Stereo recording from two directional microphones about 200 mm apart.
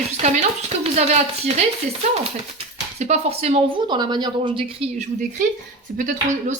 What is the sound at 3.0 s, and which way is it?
Speech, 35° right (ahead or behind).